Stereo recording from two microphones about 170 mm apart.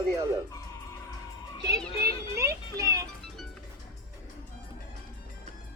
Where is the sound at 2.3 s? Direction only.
15° right (ahead or behind).